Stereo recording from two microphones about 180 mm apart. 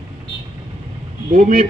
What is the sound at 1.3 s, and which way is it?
Speech, 55° right (ahead or behind).